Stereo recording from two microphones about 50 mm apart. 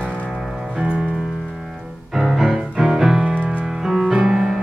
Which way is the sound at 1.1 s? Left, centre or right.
Centre.